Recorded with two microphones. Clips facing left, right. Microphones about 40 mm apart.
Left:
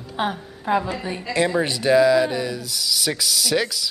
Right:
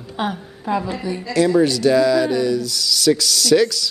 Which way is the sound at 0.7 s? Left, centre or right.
Left.